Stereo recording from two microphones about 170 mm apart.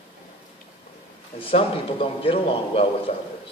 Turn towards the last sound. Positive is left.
turn(degrees=35)  # may be behind; listen again after turning